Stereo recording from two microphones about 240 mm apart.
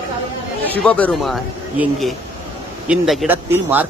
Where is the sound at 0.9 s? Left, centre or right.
Centre.